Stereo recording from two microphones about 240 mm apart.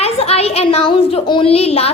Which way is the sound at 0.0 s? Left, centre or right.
Left.